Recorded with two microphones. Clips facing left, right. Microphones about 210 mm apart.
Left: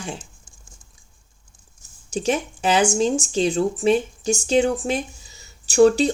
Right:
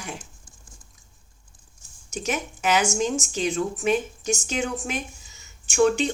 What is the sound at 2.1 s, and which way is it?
Speech, 30° left (ahead or behind).